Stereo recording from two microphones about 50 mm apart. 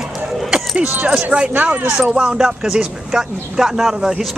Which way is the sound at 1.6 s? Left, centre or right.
Right.